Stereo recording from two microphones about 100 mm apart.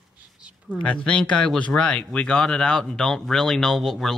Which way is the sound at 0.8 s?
10° left (ahead or behind).